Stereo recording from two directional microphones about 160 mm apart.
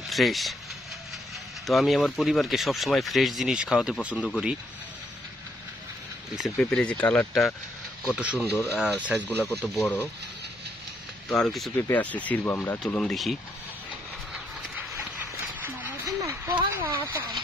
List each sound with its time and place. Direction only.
0.1 s speech: centre (ahead or behind)
1.7 s speech: centre (ahead or behind)
6.3 s speech: centre (ahead or behind)
9.8 s speech: 10° left (ahead or behind)
11.2 s speech: centre (ahead or behind)
15.6 s a sound: 15° right (ahead or behind)